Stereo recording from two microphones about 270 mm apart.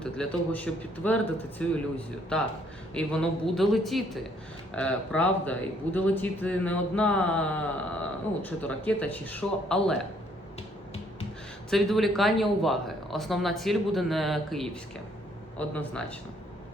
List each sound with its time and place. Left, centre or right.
0.0 s speech: centre
11.7 s speech: centre